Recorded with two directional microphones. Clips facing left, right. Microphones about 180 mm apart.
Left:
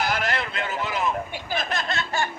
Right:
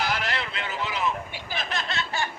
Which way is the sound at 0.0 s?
45° left (ahead or behind).